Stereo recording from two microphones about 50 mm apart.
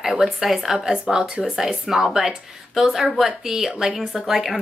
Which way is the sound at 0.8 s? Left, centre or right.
Centre.